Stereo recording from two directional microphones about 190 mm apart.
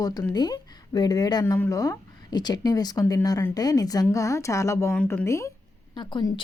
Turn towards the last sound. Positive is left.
turn(degrees=25)  # may be behind; listen again after turning